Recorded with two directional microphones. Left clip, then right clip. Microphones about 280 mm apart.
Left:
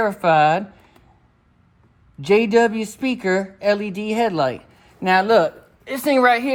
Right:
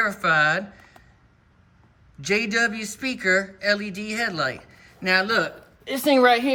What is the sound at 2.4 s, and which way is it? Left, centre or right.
Speech, left.